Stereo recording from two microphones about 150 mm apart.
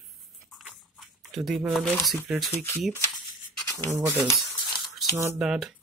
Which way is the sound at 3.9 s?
20° right (ahead or behind).